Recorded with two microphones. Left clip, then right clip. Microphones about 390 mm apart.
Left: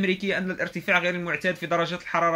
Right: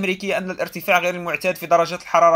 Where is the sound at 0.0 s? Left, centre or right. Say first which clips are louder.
Right 3 dB; centre.